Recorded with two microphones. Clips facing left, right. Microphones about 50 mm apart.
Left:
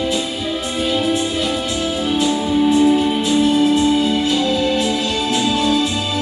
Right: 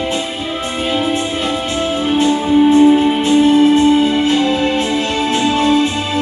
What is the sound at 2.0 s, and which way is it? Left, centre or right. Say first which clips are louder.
Music: right 5 dB; right.